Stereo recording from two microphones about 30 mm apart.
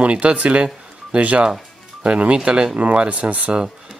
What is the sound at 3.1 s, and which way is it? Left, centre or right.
Speech, right.